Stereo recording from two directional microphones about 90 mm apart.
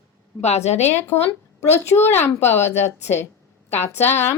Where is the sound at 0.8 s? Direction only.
25° left (ahead or behind).